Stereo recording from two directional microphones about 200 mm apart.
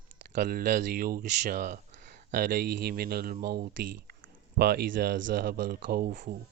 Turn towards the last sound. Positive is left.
turn(degrees=-45)  # may be behind; listen again after turning